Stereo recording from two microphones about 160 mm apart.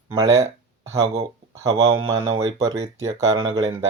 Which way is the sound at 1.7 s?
40° right (ahead or behind).